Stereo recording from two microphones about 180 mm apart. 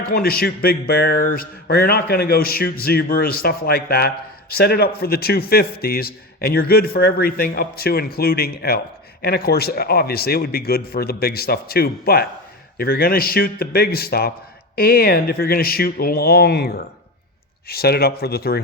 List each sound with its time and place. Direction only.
0.0 s a man's voice: 55° left (ahead or behind)